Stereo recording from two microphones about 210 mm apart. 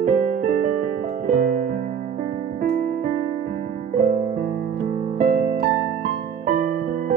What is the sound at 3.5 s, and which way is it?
Music, 40° right (ahead or behind).